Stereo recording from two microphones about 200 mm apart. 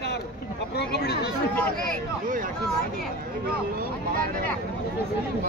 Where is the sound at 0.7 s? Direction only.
55° left (ahead or behind).